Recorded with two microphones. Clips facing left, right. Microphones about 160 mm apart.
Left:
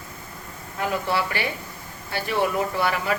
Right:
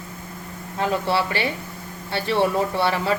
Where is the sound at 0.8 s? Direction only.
25° right (ahead or behind).